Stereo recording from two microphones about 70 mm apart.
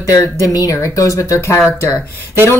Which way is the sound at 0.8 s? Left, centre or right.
Left.